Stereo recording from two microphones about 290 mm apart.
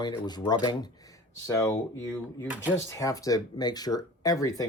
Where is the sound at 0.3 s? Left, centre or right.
Centre.